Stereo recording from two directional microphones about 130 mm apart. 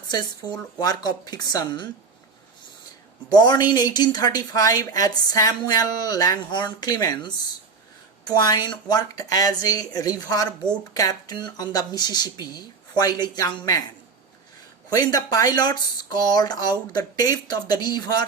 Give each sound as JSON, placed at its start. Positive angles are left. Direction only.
{"t": 0.8, "sound": "a woman's voice", "side_deg": 30}
{"t": 3.2, "sound": "a woman's voice", "side_deg": 30}
{"t": 14.8, "sound": "speech", "side_deg": 30}